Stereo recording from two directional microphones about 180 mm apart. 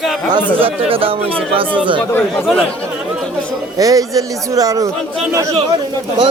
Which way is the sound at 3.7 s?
20° right (ahead or behind).